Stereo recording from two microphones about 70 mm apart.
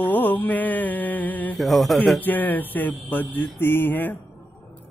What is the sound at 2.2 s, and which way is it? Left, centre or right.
Mantra, left.